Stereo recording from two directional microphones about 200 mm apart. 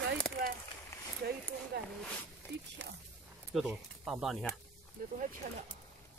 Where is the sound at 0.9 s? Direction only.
15° left (ahead or behind).